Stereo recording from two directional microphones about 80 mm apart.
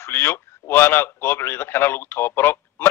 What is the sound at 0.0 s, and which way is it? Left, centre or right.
A man's voice, left.